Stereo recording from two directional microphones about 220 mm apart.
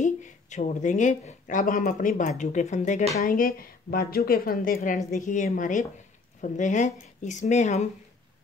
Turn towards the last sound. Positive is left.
turn(degrees=30)  # may be behind; listen again after turning